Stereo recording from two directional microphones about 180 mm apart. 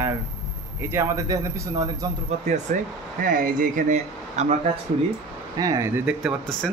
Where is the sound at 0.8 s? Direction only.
15° right (ahead or behind).